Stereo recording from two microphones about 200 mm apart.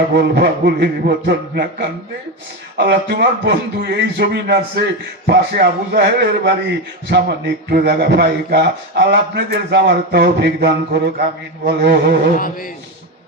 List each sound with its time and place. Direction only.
0.2 s a man's voice: 55° right (ahead or behind)